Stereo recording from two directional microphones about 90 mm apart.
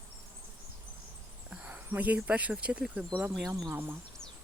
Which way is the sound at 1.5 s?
15° right (ahead or behind).